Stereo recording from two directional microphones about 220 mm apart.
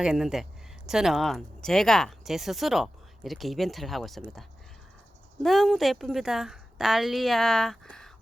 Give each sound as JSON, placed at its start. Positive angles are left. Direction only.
{"t": 0.0, "sound": "speech", "side_deg": 0}
{"t": 5.4, "sound": "speech", "side_deg": 0}